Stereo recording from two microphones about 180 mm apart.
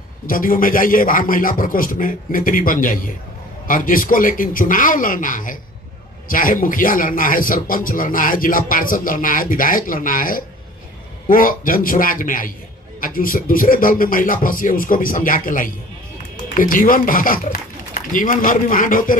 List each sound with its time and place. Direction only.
0.3 s speech: 50° left (ahead or behind)